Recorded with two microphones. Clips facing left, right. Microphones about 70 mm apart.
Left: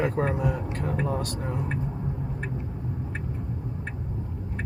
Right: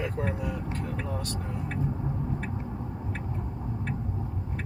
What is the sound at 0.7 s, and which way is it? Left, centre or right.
Speech, left.